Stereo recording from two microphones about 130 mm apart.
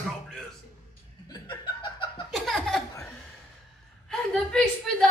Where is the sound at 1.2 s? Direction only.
30° left (ahead or behind).